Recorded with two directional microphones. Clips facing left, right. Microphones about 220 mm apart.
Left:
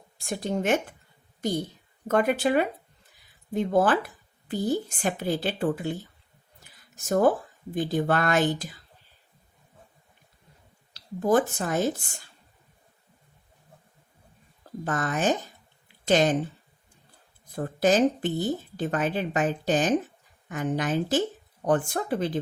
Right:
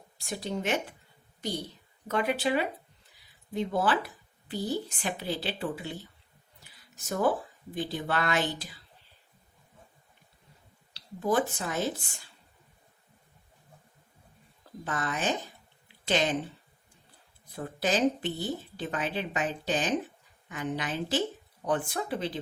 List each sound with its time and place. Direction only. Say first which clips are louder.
0.2 s speech: left 5 dB; 50° left (ahead or behind)
10.9 s speech: left 5 dB; 45° left (ahead or behind)
14.8 s speech: left 6 dB; 45° left (ahead or behind)
17.5 s speech: left 7 dB; 45° left (ahead or behind)